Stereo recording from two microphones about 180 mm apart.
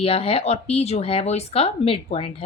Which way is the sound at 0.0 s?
35° left (ahead or behind).